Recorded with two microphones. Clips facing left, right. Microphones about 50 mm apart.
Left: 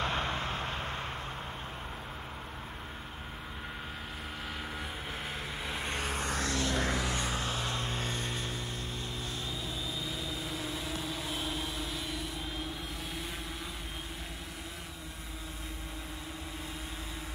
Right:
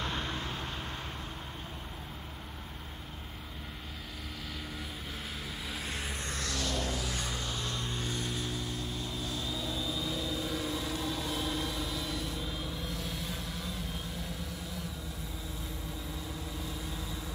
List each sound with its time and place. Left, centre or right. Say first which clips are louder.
0.0 s vehicle: left 3 dB; centre
5.7 s vehicle: left 3 dB; centre
6.1 s a sound: left 4 dB; left
7.1 s vehicle: left 3 dB; left